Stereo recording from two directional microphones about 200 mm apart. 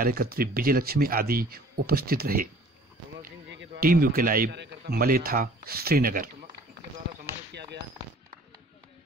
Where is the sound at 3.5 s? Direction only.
65° right (ahead or behind).